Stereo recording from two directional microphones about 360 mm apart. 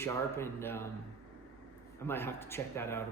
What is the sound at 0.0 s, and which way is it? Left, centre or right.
Speech, centre.